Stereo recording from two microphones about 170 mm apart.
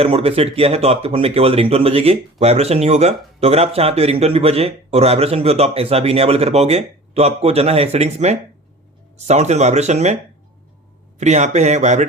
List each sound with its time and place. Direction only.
0.0 s speech: 35° right (ahead or behind)
11.2 s speech: 45° right (ahead or behind)